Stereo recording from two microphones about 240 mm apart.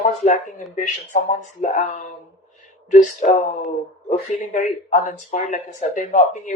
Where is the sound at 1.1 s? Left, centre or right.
Left.